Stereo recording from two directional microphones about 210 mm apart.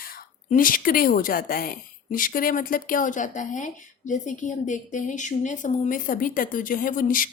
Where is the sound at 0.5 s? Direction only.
40° left (ahead or behind).